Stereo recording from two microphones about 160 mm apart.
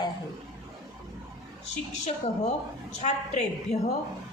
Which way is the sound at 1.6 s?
45° left (ahead or behind).